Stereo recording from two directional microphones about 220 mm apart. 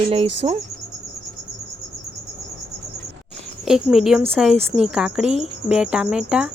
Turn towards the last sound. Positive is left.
turn(degrees=-5)  # may be behind; listen again after turning